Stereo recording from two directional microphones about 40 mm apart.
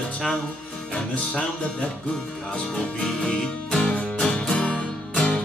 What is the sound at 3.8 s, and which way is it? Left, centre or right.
Music, left.